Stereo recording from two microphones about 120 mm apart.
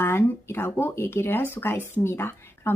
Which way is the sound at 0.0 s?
20° left (ahead or behind).